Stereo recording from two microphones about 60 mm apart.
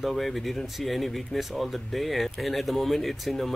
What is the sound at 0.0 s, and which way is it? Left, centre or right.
Speech, centre.